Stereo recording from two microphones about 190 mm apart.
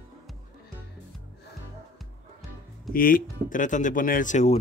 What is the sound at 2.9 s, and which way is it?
Speech, 50° left (ahead or behind).